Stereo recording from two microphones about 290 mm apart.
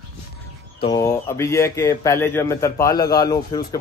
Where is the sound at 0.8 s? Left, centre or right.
Centre.